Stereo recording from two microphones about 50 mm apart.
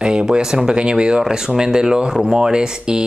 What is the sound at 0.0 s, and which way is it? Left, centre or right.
Speech, centre.